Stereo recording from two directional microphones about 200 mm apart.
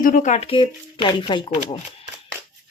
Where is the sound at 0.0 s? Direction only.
40° left (ahead or behind); by 1.8 s 25° left (ahead or behind).